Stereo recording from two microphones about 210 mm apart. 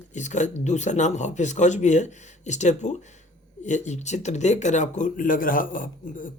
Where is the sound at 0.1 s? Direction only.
35° left (ahead or behind).